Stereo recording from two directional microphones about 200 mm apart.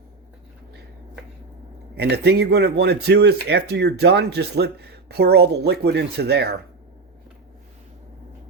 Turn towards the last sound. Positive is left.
turn(degrees=-55)  # may be behind; listen again after turning